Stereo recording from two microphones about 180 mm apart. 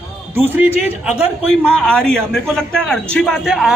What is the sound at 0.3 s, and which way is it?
Speech, 10° right (ahead or behind).